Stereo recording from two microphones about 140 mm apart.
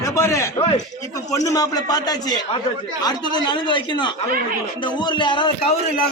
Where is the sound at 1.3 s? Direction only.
25° left (ahead or behind).